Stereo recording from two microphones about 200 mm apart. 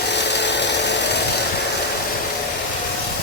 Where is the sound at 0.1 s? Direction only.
60° left (ahead or behind).